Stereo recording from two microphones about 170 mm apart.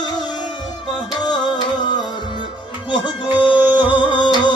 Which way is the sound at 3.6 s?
10° right (ahead or behind).